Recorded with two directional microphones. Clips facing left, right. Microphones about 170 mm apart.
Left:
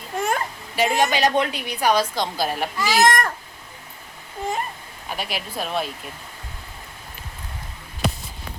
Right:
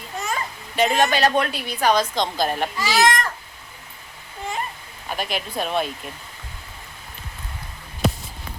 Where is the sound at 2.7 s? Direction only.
50° left (ahead or behind).